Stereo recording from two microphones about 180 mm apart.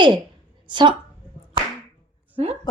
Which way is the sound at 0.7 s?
25° right (ahead or behind).